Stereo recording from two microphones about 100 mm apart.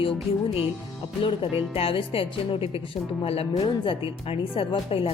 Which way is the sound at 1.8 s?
70° left (ahead or behind).